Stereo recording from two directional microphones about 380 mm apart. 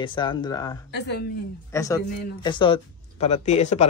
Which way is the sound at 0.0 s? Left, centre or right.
Centre.